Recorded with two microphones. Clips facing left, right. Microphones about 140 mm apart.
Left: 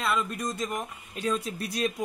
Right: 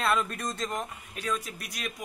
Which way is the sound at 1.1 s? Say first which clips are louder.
Left 4 dB; 25° left (ahead or behind).